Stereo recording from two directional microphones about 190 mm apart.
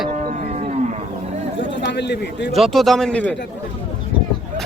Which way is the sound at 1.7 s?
65° left (ahead or behind).